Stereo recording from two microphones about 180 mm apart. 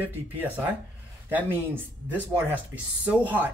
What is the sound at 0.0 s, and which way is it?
Speech, 10° right (ahead or behind).